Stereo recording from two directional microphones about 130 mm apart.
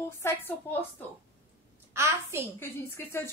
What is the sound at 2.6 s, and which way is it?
Speech, 20° left (ahead or behind).